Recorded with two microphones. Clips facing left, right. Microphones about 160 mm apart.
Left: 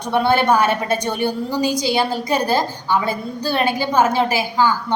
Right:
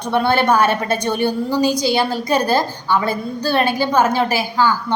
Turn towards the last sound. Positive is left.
turn(degrees=15)  # may be behind; listen again after turning